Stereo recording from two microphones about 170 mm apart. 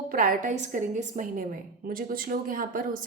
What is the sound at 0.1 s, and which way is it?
A woman's voice, 55° right (ahead or behind).